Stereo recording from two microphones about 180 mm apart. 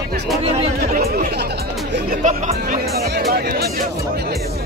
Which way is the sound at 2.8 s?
60° right (ahead or behind).